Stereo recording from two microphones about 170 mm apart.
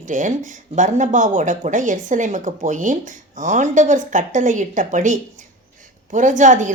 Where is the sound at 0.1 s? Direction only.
50° right (ahead or behind).